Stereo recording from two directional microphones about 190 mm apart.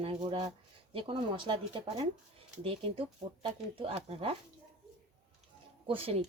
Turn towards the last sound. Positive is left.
turn(degrees=-30)  # may be behind; listen again after turning